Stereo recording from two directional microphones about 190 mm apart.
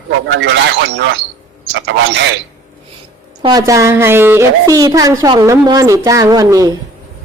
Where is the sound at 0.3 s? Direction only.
70° right (ahead or behind).